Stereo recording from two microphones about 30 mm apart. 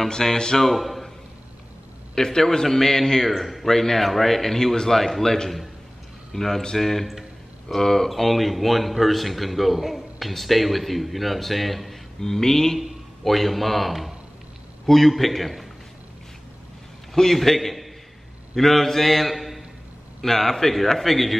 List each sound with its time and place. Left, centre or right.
0.1 s speech: centre
0.6 s a man's voice: centre
2.1 s a man's voice: centre
3.3 s a man's voice: centre
8.1 s a man's voice: centre
12.2 s a man's voice: centre
13.2 s a man's voice: centre
17.1 s a man's voice: centre
20.2 s a man's voice: centre